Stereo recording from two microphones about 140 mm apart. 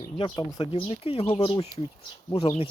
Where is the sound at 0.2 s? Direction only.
35° left (ahead or behind).